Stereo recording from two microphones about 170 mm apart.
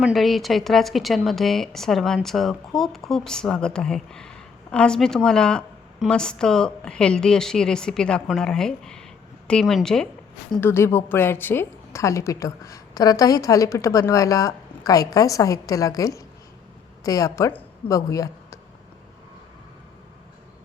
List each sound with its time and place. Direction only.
0.0 s a woman's voice: centre (ahead or behind); by 18.6 s 20° left (ahead or behind)